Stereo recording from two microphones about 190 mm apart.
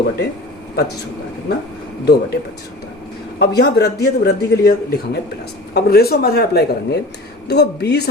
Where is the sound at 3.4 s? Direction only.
60° left (ahead or behind).